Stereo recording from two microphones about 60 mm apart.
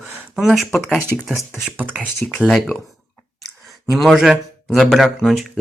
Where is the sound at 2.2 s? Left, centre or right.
Centre.